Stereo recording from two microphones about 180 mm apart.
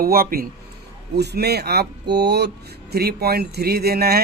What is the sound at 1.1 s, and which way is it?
Speech, 65° right (ahead or behind).